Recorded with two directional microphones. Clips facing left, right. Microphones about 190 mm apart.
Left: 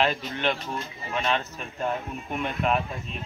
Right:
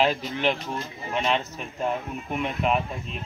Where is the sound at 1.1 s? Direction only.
20° right (ahead or behind).